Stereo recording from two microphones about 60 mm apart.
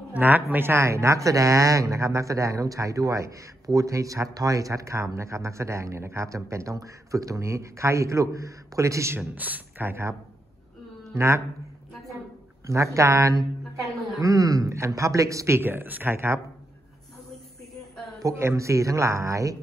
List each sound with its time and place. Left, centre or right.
0.1 s speech: right
9.3 s a man's voice: right
11.1 s speech: right
12.6 s speech: right
14.2 s speech: right
15.6 s a man's voice: right
18.4 s speech: right